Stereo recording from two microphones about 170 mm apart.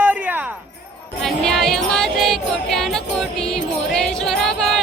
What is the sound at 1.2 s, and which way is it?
Music, centre (ahead or behind).